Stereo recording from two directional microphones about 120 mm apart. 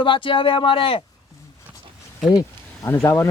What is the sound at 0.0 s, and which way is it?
Speech, 45° left (ahead or behind).